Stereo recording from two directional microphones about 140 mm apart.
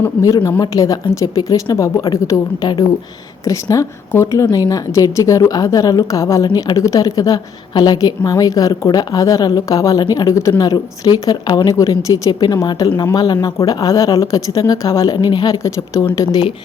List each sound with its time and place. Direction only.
0.0 s a woman's voice: 20° left (ahead or behind)